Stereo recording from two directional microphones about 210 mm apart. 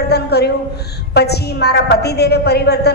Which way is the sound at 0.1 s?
50° left (ahead or behind).